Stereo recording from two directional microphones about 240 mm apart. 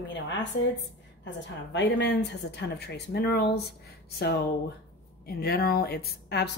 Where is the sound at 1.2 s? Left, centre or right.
Left.